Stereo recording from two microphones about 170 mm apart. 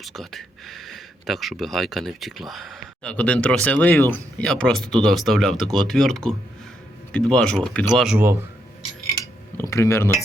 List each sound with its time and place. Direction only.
0.0 s speech: centre (ahead or behind)
7.9 s speech: 5° right (ahead or behind)
9.2 s speech: 15° left (ahead or behind)